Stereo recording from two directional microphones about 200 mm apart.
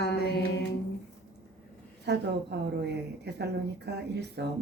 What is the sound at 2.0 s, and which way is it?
Speech, 60° right (ahead or behind).